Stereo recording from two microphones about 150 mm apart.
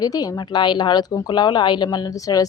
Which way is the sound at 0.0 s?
25° left (ahead or behind).